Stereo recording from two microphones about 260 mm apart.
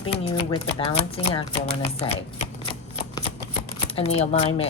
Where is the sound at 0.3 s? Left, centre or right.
Left.